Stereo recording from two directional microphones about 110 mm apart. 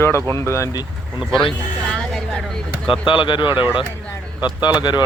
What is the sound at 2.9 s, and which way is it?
Speech, 50° left (ahead or behind).